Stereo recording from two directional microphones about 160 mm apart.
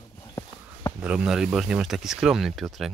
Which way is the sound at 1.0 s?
5° right (ahead or behind).